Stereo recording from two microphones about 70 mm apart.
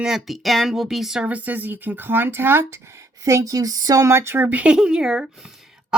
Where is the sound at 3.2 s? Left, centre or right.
Right.